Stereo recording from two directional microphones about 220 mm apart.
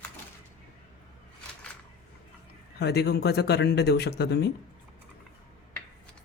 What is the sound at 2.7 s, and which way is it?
Speech, 50° left (ahead or behind).